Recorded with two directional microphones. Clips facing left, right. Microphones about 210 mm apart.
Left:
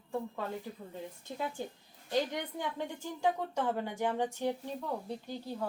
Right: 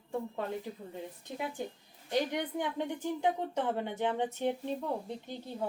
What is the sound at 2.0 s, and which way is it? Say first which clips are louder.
A woman's voice: right 1 dB; 20° right (ahead or behind).